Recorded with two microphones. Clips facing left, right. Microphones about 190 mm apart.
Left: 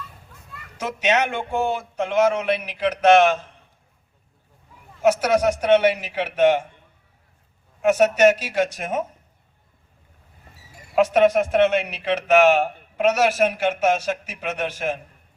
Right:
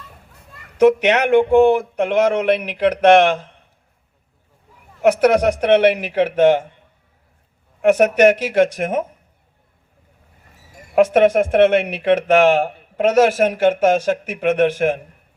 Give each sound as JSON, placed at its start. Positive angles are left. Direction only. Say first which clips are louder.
{"t": 0.8, "sound": "speech", "louder": "right 9 dB", "side_deg": -60}
{"t": 5.0, "sound": "speech", "louder": "right 4 dB", "side_deg": -60}
{"t": 7.8, "sound": "speech", "louder": "right 3 dB", "side_deg": -55}
{"t": 10.9, "sound": "speech", "louder": "right 4 dB", "side_deg": -50}